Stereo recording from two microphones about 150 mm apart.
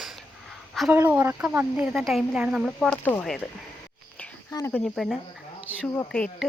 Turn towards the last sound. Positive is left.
turn(degrees=5)  # may be behind; listen again after turning